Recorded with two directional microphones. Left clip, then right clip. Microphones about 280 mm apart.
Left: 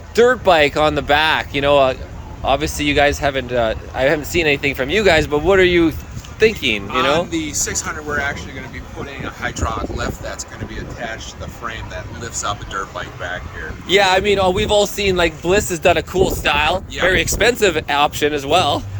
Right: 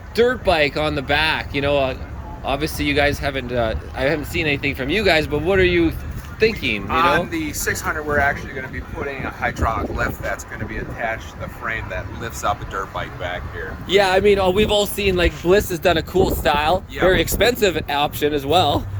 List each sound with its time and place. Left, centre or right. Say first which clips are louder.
0.2 s speech: left 4 dB; centre
6.9 s speech: right 2 dB; centre
9.4 s speech: right 1 dB; centre
12.5 s speech: right 2 dB; right
13.8 s speech: left 1 dB; centre